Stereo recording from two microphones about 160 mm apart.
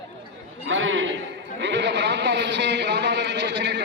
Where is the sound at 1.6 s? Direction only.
90° right.